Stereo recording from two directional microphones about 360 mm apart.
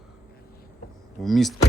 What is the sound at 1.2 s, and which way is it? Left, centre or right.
Speech, centre.